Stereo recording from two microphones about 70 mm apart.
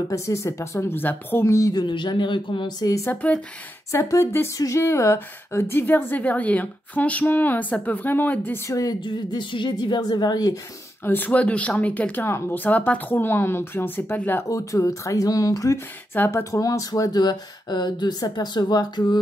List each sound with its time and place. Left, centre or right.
0.1 s speech: left
0.7 s a woman's voice: left
1.4 s speech: left
1.7 s speech: left
2.8 s speech: left
3.1 s a woman's voice: left
4.1 s a woman's voice: left
8.6 s a woman's voice: left
11.1 s a woman's voice: left
12.3 s a woman's voice: left
12.5 s a woman's voice: left
14.5 s speech: left
16.1 s a woman's voice: left
16.5 s speech: left